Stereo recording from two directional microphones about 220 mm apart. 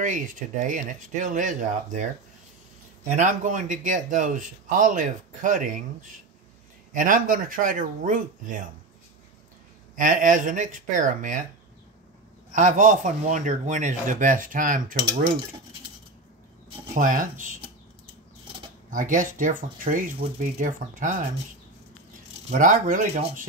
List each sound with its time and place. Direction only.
0.0 s speech: 35° right (ahead or behind)
3.1 s speech: 35° right (ahead or behind)
6.9 s speech: 35° right (ahead or behind)
9.9 s speech: 35° right (ahead or behind)
12.5 s speech: 35° right (ahead or behind)
16.9 s speech: 35° right (ahead or behind)
18.9 s speech: 35° right (ahead or behind)
22.5 s speech: 35° right (ahead or behind)